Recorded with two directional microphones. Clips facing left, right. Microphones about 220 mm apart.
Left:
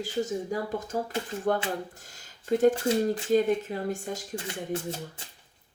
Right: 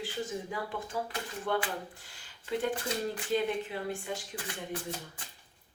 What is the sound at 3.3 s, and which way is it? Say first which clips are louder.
Speech: left 6 dB; 45° left (ahead or behind).